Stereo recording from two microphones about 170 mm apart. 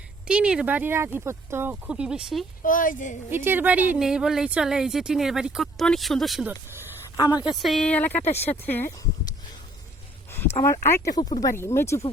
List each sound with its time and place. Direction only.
0.3 s speech: 5° right (ahead or behind)
2.6 s a woman's voice: 50° left (ahead or behind)
3.2 s speech: 10° right (ahead or behind)
6.5 s a sound: 15° right (ahead or behind)
7.2 s speech: 25° left (ahead or behind)
7.5 s speech: centre (ahead or behind)
8.2 s speech: 40° left (ahead or behind)
8.4 s speech: 10° left (ahead or behind)
10.6 s speech: 20° left (ahead or behind)